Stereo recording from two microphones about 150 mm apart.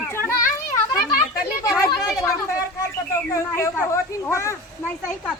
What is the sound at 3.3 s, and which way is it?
Speech, 20° left (ahead or behind).